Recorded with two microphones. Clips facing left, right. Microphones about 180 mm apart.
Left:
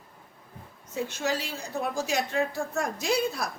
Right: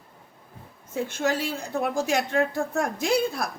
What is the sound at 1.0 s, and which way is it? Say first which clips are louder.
A woman's voice: right 4 dB; 55° right (ahead or behind).